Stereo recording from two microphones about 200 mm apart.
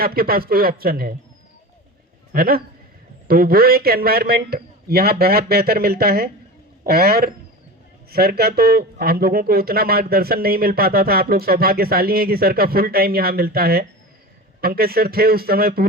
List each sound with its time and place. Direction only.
0.0 s speech: 50° right (ahead or behind)
2.3 s speech: 50° right (ahead or behind)